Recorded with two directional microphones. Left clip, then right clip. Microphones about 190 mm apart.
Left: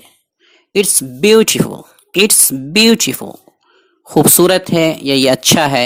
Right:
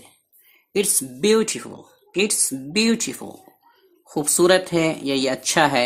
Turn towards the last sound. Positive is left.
turn(degrees=35)  # may be behind; listen again after turning